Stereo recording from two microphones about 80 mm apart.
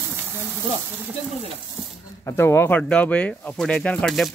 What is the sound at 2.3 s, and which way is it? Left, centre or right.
Speech, left.